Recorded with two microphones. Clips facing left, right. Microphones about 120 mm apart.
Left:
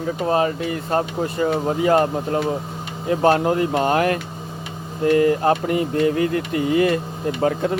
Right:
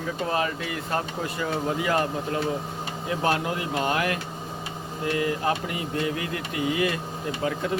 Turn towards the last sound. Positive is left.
turn(degrees=45)  # may be behind; listen again after turning